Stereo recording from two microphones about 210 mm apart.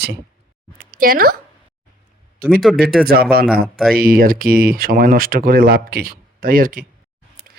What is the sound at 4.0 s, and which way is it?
Speech, 45° right (ahead or behind).